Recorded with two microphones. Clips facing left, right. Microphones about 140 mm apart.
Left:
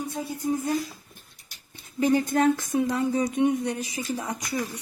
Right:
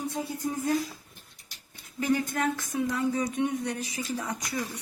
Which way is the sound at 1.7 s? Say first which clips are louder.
Left 5 dB; 25° left (ahead or behind).